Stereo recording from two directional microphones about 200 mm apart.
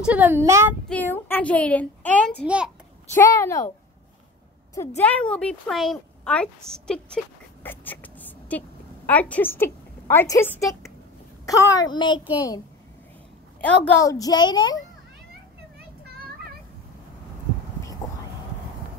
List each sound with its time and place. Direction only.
0.0 s speech: 5° right (ahead or behind)
0.8 s a child's voice: 10° left (ahead or behind)
2.4 s a woman's voice: 5° right (ahead or behind)
3.2 s a child's voice: 15° left (ahead or behind)
4.7 s a woman's voice: 10° left (ahead or behind)
13.6 s a woman's voice: 10° left (ahead or behind)